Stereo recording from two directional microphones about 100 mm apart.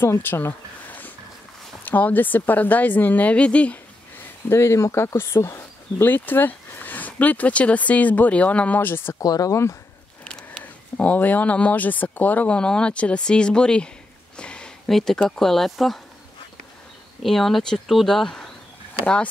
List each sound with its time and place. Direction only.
0.0 s a woman's voice: 20° left (ahead or behind)
4.5 s speech: 25° left (ahead or behind)
9.2 s speech: 40° left (ahead or behind)
10.2 s speech: 10° left (ahead or behind)
14.3 s a sound: 10° left (ahead or behind)
15.2 s speech: 5° left (ahead or behind)
17.2 s speech: centre (ahead or behind)